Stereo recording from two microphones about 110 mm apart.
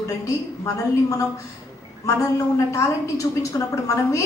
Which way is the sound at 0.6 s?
30° left (ahead or behind).